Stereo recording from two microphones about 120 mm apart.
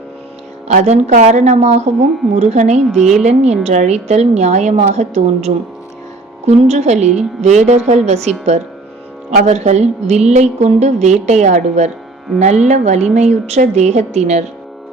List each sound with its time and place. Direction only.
0.7 s a woman's voice: 70° right (ahead or behind)
3.0 s a woman's voice: centre (ahead or behind)
3.2 s a woman's voice: 70° right (ahead or behind)